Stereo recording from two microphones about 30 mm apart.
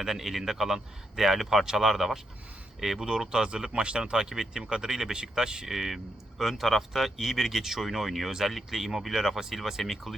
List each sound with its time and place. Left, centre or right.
0.0 s speech: centre
3.3 s speech: right
4.0 s speech: centre
5.6 s speech: centre
7.9 s speech: centre